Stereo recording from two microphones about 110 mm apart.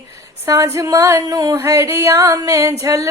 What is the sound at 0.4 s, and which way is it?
Music, 25° right (ahead or behind).